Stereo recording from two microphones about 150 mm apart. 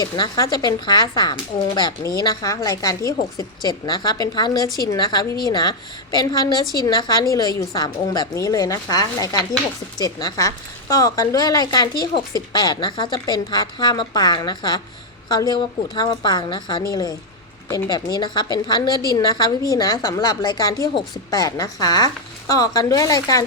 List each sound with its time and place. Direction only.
0.0 s a woman's voice: 25° left (ahead or behind)